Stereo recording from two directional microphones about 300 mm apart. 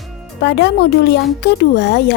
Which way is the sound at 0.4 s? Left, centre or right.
Left.